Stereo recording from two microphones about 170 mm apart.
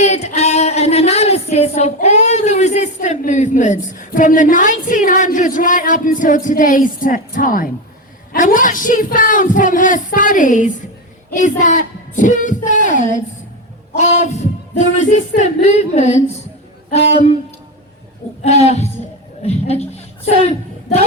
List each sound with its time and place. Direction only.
0.0 s music: 40° left (ahead or behind)
8.3 s a woman's voice: 55° left (ahead or behind)
14.0 s a sound: 45° left (ahead or behind)
15.4 s a woman's voice: 40° left (ahead or behind)
18.4 s a woman's voice: 40° left (ahead or behind)